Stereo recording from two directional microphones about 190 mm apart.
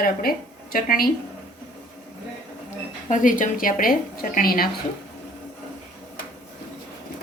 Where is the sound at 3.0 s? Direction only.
45° left (ahead or behind).